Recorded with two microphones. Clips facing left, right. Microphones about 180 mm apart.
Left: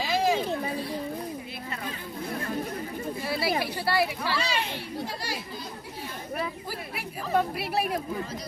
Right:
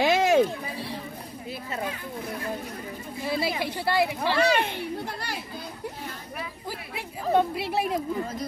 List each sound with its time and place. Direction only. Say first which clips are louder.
0.0 s a sound: right 4 dB; 70° right (ahead or behind)
3.3 s a woman's voice: right 2 dB; 20° right (ahead or behind)
4.4 s a child's voice: right 7 dB; 60° right (ahead or behind)
7.0 s a woman's voice: right 4 dB; 20° right (ahead or behind)